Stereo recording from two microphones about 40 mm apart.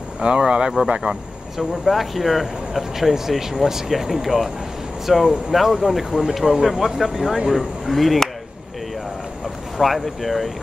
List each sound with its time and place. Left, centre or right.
0.5 s speech: right
1.6 s speech: centre
9.8 s speech: centre